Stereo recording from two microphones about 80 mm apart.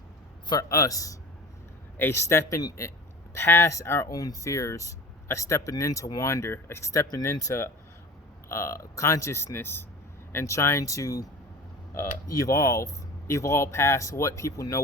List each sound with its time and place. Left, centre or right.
0.7 s speech: left
2.0 s speech: left
3.3 s speech: left
7.1 s speech: left